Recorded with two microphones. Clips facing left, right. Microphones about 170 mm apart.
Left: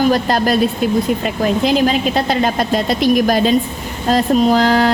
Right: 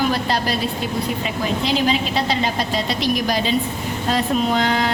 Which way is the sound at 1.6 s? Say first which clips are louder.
Left 4 dB; 50° left (ahead or behind).